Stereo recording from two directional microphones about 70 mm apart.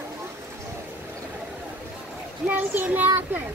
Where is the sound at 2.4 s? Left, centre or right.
Right.